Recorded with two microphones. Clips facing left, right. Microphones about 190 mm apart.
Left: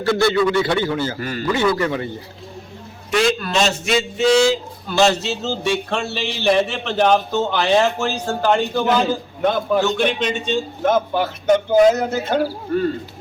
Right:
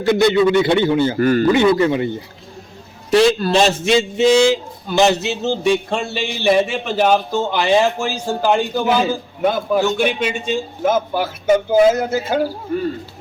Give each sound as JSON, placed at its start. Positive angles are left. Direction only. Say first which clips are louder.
{"t": 0.0, "sound": "a man's voice", "louder": "right 3 dB", "side_deg": -20}
{"t": 1.2, "sound": "a man's voice", "louder": "right 11 dB", "side_deg": -50}
{"t": 1.5, "sound": "a man's voice", "louder": "right 1 dB", "side_deg": -20}
{"t": 3.1, "sound": "a man's voice", "louder": "right 5 dB", "side_deg": -35}
{"t": 4.2, "sound": "speech", "louder": "right 1 dB", "side_deg": -20}